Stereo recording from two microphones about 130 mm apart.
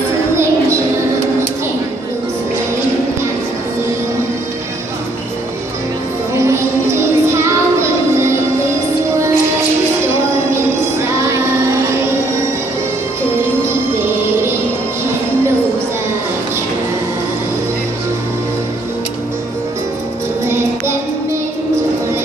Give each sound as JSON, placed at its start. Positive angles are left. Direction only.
{"t": 6.3, "sound": "music", "side_deg": -20}
{"t": 10.5, "sound": "music", "side_deg": -20}
{"t": 20.4, "sound": "music", "side_deg": -20}